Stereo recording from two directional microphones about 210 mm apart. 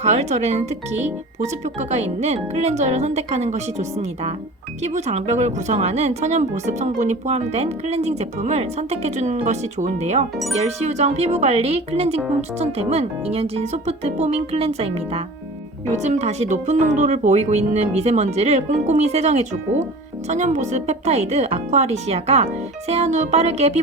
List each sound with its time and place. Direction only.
0.0 s speech: 30° right (ahead or behind)